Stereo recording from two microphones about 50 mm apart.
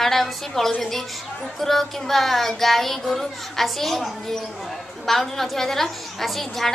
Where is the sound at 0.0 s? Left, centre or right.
Centre.